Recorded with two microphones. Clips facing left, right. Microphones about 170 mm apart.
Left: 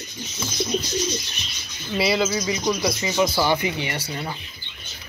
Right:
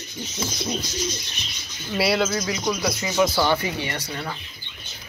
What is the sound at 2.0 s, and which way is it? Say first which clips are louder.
A man's voice: even; centre (ahead or behind).